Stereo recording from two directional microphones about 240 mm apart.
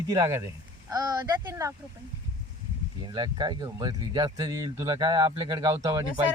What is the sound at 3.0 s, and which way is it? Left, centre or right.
Speech, centre.